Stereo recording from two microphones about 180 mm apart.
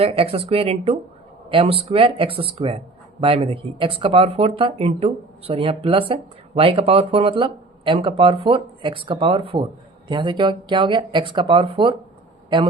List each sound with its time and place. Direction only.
0.0 s speech: 30° right (ahead or behind)